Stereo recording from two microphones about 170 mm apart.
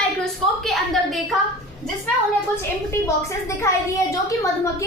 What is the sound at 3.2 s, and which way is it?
A woman's voice, 15° left (ahead or behind).